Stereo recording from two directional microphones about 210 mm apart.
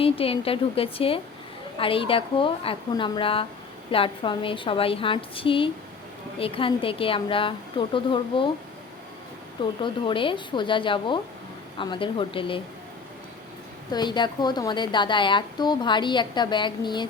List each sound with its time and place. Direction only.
0.0 s a woman's voice: 25° left (ahead or behind)
9.8 s a woman's voice: 25° left (ahead or behind)
13.9 s a woman's voice: 20° left (ahead or behind)